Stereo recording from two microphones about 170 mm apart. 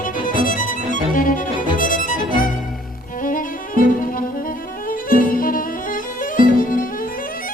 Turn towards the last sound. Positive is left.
turn(degrees=55)  # may be behind; listen again after turning